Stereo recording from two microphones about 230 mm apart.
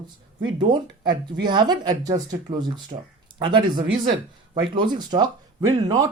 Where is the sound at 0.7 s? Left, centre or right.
Centre.